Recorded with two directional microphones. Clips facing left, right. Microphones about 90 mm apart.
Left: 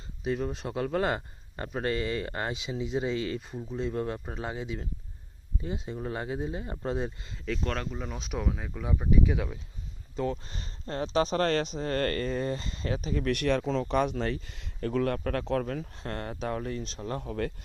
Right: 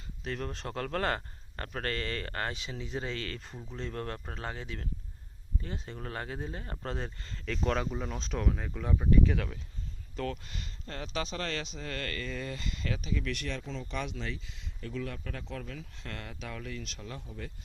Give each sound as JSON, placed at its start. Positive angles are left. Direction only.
{"t": 0.3, "sound": "a man's voice", "side_deg": 10}
{"t": 7.4, "sound": "a man's voice", "side_deg": 0}
{"t": 13.3, "sound": "speech", "side_deg": 60}
{"t": 14.0, "sound": "speech", "side_deg": 50}
{"t": 17.2, "sound": "speech", "side_deg": 65}